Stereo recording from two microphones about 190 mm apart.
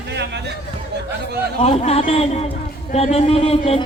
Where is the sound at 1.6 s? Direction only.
35° left (ahead or behind).